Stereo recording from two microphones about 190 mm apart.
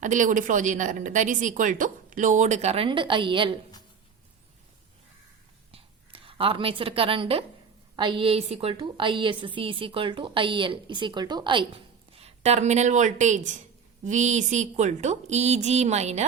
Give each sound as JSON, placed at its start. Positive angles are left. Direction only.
{"t": 0.0, "sound": "speech", "side_deg": -40}
{"t": 5.7, "sound": "a sound", "side_deg": -30}
{"t": 7.9, "sound": "a woman's voice", "side_deg": -25}